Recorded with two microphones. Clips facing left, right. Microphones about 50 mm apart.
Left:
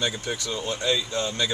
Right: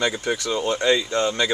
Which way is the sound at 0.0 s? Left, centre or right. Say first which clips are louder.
Right 5 dB; right.